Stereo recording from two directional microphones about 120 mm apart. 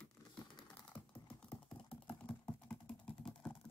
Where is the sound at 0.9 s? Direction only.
10° left (ahead or behind).